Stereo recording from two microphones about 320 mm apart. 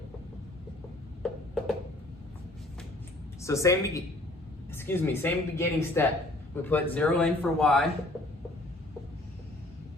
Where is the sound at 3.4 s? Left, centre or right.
Centre.